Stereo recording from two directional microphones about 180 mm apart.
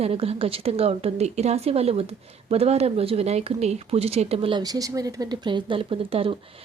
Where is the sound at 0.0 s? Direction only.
35° right (ahead or behind).